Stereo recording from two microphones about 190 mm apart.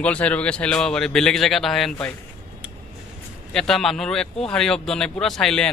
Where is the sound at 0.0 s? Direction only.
5° left (ahead or behind).